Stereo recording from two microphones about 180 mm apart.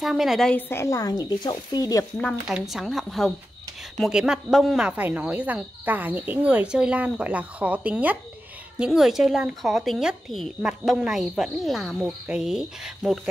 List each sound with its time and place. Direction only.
0.0 s speech: centre (ahead or behind); by 2.0 s 20° left (ahead or behind)
2.1 s speech: 5° left (ahead or behind)